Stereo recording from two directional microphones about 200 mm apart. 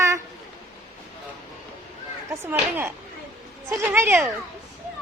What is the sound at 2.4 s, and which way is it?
Speech, 10° right (ahead or behind).